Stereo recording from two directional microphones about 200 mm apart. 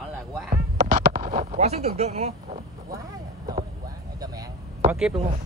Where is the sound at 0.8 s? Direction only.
40° right (ahead or behind).